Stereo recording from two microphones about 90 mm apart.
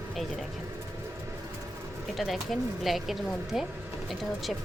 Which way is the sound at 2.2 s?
Centre (ahead or behind).